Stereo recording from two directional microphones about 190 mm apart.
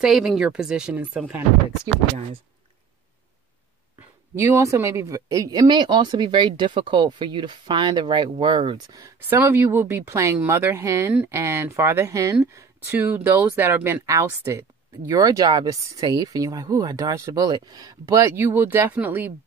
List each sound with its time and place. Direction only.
0.0 s speech: centre (ahead or behind)
4.4 s speech: 15° right (ahead or behind)